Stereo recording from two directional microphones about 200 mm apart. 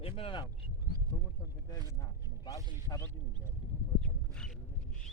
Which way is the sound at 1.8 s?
15° left (ahead or behind).